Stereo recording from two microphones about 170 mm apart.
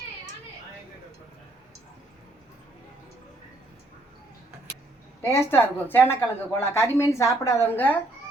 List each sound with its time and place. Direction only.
5.2 s a woman's voice: 15° left (ahead or behind)